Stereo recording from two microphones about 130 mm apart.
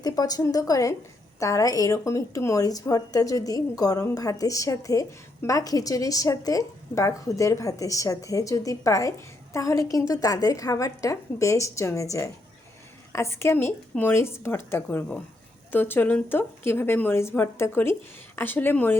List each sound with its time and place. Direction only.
0.0 s a woman's voice: 30° left (ahead or behind)